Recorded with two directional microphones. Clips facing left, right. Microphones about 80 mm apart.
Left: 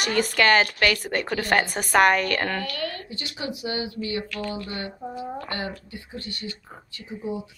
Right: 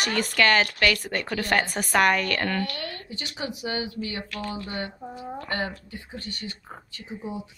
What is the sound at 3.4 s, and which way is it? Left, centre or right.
A woman's voice, right.